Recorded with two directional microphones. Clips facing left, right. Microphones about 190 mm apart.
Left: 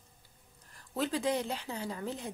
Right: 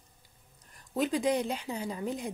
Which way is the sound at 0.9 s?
15° right (ahead or behind).